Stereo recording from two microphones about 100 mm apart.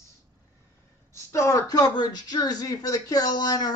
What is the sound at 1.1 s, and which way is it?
Speech, 30° left (ahead or behind).